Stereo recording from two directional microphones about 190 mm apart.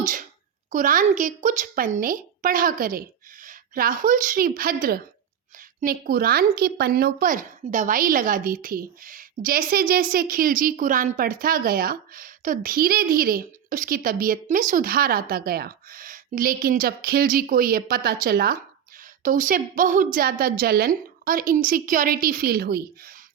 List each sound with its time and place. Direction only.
0.0 s a child's voice: 45° right (ahead or behind)